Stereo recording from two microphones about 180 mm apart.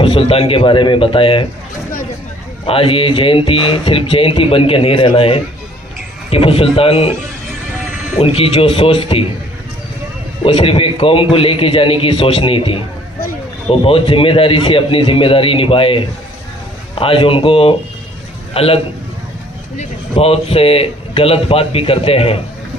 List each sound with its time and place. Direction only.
0.0 s a man's voice: 30° left (ahead or behind)
2.6 s speech: 30° left (ahead or behind)
8.2 s speech: 35° left (ahead or behind)
10.4 s a man's voice: 30° left (ahead or behind)
19.8 s speech: 35° left (ahead or behind)